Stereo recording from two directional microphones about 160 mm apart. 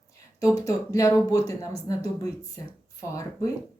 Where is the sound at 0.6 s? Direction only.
20° left (ahead or behind).